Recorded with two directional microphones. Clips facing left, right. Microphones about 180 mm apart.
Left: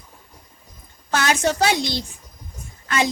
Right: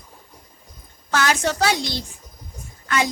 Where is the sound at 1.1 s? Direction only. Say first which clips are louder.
Left 1 dB; 25° left (ahead or behind).